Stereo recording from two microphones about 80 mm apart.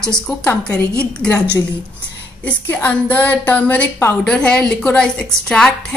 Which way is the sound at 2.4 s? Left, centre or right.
Left.